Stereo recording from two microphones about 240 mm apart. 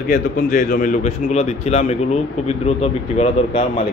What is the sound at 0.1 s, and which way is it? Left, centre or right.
A man's voice, left.